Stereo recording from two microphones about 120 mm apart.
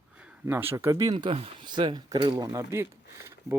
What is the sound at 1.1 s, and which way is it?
Speech, 40° right (ahead or behind).